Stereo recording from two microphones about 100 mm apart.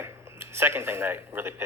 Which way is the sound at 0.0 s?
25° right (ahead or behind).